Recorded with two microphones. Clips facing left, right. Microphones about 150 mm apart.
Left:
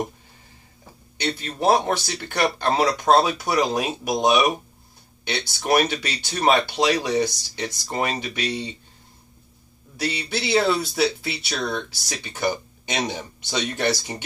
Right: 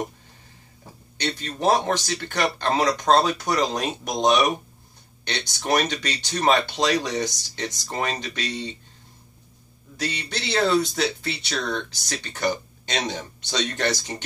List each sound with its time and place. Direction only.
1.1 s speech: 10° left (ahead or behind)
9.9 s speech: 10° left (ahead or behind)